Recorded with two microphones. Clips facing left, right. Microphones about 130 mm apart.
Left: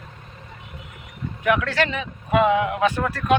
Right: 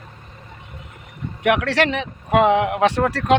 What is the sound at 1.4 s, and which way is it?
Speech, 75° right (ahead or behind).